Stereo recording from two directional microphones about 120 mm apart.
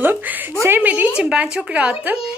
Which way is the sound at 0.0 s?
15° right (ahead or behind).